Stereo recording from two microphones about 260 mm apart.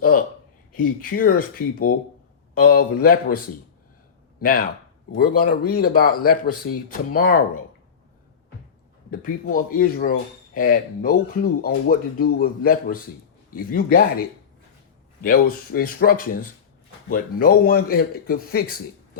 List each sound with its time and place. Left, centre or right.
0.0 s a sound: left
0.7 s speech: left
4.4 s speech: left
5.7 s speech: left
9.0 s speech: left